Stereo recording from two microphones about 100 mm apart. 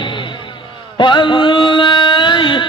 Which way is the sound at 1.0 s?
50° left (ahead or behind).